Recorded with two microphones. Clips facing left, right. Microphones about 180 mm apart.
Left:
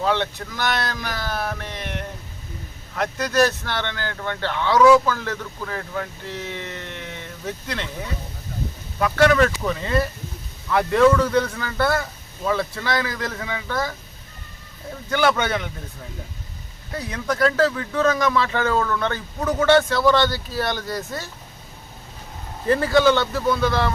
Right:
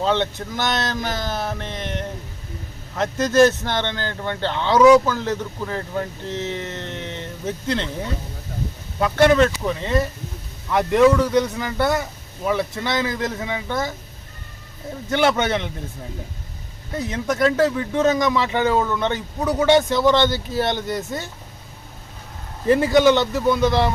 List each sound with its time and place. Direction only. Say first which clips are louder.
0.0 s speech: right 2 dB; 20° right (ahead or behind)
3.0 s speech: right 4 dB; 25° right (ahead or behind)
9.0 s speech: right 2 dB; 20° right (ahead or behind)
15.1 s speech: right 1 dB; 25° right (ahead or behind)
16.9 s speech: right 2 dB; 20° right (ahead or behind)
22.6 s speech: right 2 dB; 20° right (ahead or behind)